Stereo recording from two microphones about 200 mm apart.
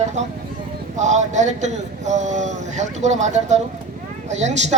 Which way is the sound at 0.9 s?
35° right (ahead or behind).